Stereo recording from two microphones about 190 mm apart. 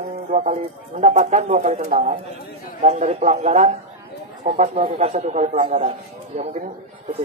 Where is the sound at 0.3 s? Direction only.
45° right (ahead or behind).